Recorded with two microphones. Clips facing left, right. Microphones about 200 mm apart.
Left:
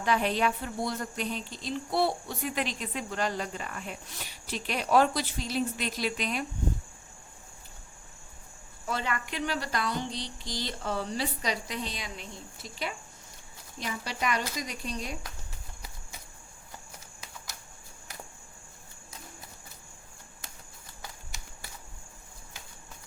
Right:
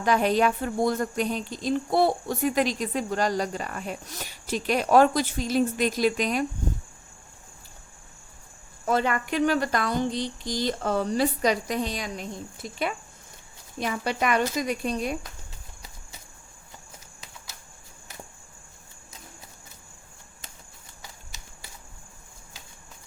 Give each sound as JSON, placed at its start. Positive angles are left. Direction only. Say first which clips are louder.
{"t": 0.0, "sound": "speech", "louder": "right 5 dB", "side_deg": -45}
{"t": 8.9, "sound": "speech", "louder": "right 8 dB", "side_deg": -50}